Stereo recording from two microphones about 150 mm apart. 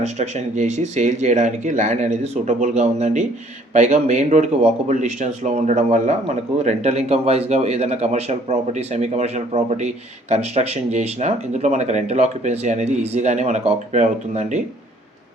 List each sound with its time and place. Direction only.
0.0 s speech: 45° right (ahead or behind)